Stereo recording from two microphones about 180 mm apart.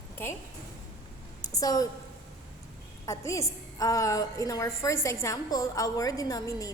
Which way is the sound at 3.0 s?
15° left (ahead or behind).